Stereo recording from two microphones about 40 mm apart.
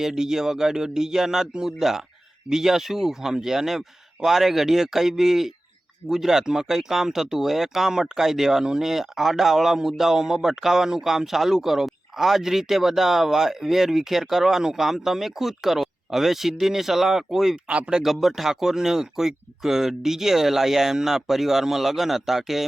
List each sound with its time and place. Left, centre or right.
0.0 s speech: centre
17.7 s speech: right
18.0 s speech: centre